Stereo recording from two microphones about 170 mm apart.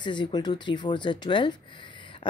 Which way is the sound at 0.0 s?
25° left (ahead or behind).